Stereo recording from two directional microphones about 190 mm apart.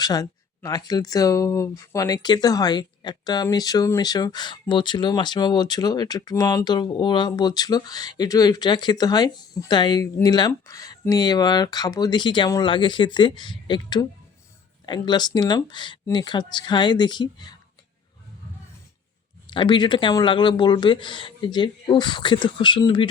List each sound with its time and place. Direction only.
0.0 s speech: 20° left (ahead or behind)
19.5 s speech: 25° left (ahead or behind)